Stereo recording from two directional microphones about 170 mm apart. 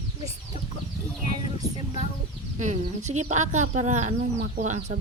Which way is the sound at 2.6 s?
45° right (ahead or behind).